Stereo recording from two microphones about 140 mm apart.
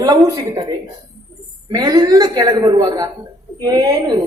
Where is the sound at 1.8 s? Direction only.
30° right (ahead or behind).